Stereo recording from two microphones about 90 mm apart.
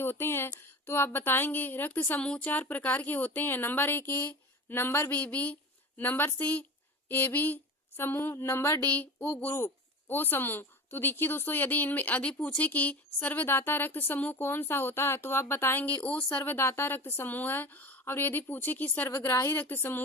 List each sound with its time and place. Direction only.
0.0 s a woman's voice: 25° left (ahead or behind)